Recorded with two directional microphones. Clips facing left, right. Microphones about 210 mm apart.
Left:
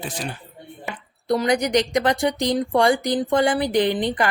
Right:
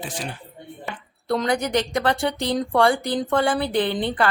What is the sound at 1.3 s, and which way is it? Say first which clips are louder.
Speech: left 2 dB; 15° left (ahead or behind).